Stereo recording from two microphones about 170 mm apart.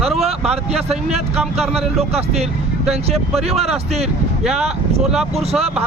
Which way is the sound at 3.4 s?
35° right (ahead or behind).